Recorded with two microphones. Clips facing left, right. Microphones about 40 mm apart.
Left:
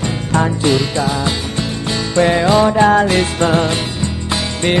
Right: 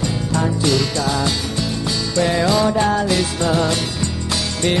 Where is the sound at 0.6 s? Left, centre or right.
Left.